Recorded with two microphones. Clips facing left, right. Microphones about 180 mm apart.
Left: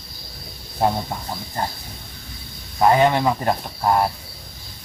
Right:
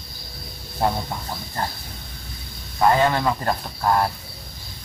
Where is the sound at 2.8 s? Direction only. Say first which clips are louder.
Left 2 dB; 20° left (ahead or behind).